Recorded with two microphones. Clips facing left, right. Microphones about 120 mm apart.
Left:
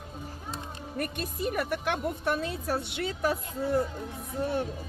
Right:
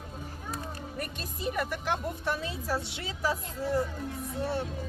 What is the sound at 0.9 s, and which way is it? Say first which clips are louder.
A woman's voice: left 9 dB; 60° left (ahead or behind).